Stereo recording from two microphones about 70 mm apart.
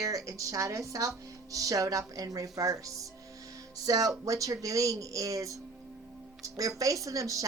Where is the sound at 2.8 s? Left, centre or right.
Right.